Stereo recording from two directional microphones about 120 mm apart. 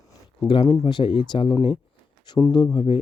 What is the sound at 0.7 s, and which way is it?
Speech, 40° left (ahead or behind).